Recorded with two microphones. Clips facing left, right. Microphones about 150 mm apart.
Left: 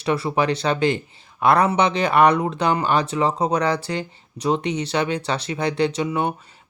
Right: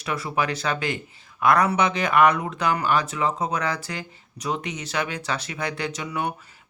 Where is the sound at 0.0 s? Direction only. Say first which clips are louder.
Left 5 dB; 30° left (ahead or behind).